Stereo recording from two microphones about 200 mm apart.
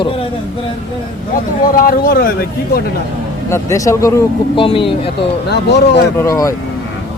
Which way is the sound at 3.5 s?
15° left (ahead or behind).